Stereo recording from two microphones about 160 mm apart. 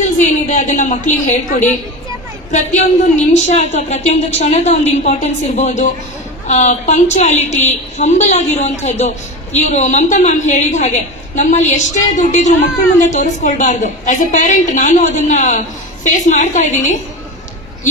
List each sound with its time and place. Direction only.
0.0 s a woman's voice: 50° left (ahead or behind)